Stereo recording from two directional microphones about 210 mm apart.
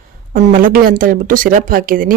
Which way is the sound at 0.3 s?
40° right (ahead or behind).